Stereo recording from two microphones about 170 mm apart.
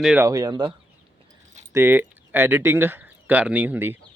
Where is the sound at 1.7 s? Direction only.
15° right (ahead or behind).